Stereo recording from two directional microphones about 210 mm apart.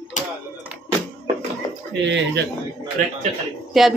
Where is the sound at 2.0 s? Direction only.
60° right (ahead or behind).